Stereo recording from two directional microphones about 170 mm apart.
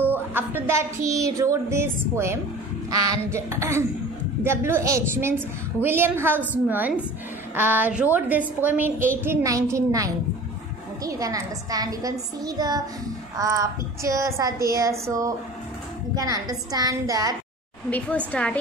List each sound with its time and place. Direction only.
0.0 s a woman's voice: 10° right (ahead or behind)
17.8 s speech: 10° left (ahead or behind)